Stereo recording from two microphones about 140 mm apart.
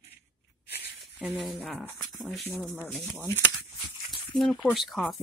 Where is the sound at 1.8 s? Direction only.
20° left (ahead or behind).